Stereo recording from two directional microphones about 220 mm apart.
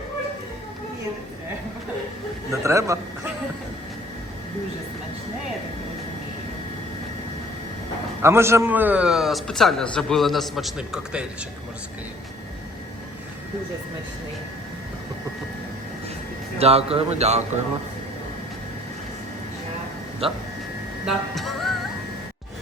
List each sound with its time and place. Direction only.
2.5 s a man's voice: 15° right (ahead or behind)
8.2 s a man's voice: 10° right (ahead or behind)
16.6 s a man's voice: 25° right (ahead or behind)
20.2 s a man's voice: 25° right (ahead or behind)
21.0 s music: centre (ahead or behind)